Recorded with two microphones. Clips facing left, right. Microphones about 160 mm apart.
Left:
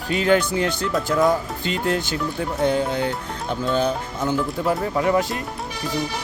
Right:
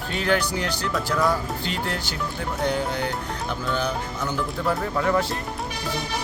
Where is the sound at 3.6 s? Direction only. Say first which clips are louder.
Left 6 dB; 20° left (ahead or behind).